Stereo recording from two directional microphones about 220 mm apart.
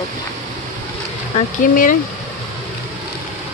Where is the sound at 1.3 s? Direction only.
35° left (ahead or behind).